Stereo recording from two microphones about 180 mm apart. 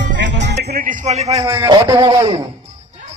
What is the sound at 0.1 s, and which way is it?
Music, 85° right.